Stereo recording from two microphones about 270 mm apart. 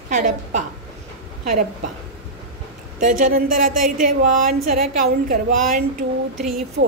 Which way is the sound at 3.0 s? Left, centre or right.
Right.